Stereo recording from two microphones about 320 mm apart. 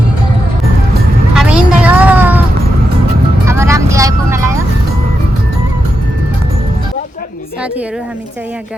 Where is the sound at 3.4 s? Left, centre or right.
Centre.